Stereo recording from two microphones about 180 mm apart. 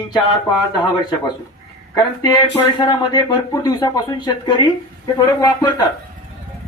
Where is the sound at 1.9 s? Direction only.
25° left (ahead or behind).